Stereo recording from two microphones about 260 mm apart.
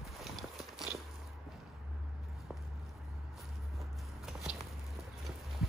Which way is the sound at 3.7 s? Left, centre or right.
Centre.